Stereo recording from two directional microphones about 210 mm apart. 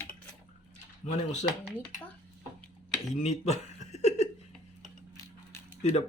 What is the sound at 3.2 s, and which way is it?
Chuckle, 30° left (ahead or behind).